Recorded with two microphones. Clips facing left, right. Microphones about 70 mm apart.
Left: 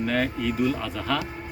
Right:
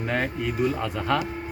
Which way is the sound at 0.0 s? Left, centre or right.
Right.